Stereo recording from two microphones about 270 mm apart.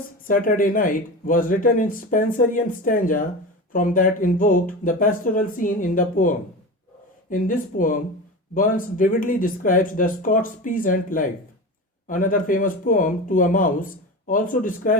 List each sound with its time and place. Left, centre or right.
0.3 s speech: left